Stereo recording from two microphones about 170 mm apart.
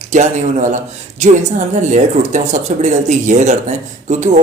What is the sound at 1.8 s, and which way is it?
Speech, 45° right (ahead or behind).